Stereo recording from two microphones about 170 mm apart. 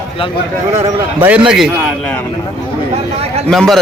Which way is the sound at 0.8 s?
10° right (ahead or behind).